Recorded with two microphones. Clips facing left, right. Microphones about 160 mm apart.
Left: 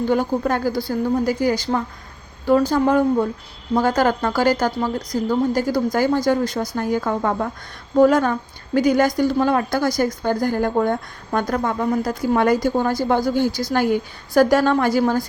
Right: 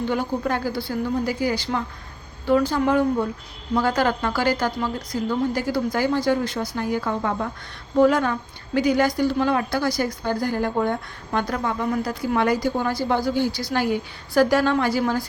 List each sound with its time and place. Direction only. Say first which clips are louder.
0.1 s a woman's voice: left 6 dB; 45° left (ahead or behind)